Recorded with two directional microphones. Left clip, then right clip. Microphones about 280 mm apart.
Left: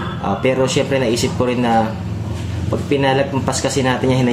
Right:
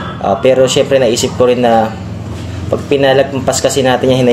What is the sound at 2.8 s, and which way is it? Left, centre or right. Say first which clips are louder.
A man's voice: right 7 dB; left.